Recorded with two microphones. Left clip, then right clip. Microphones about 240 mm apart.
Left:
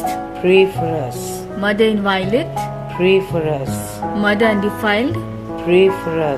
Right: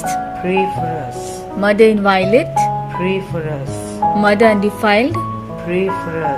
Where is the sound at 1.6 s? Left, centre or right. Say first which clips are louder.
Right 5 dB; centre.